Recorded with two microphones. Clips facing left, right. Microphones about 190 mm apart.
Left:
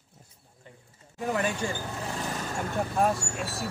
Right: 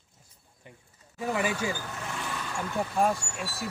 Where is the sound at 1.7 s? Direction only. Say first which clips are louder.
Left 3 dB; 30° left (ahead or behind); by 3.7 s 45° left (ahead or behind).